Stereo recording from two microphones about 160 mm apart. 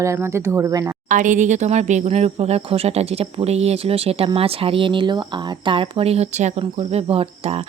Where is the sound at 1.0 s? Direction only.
55° right (ahead or behind).